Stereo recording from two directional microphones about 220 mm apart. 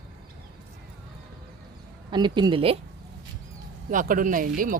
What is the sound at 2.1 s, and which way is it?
Speech, 20° right (ahead or behind).